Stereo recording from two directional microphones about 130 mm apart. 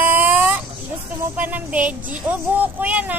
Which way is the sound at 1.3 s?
10° right (ahead or behind).